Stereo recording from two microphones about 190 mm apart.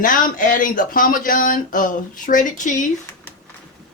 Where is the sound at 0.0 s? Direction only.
45° left (ahead or behind).